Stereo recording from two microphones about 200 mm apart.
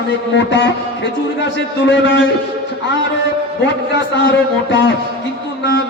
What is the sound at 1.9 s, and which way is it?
Music, 60° left (ahead or behind).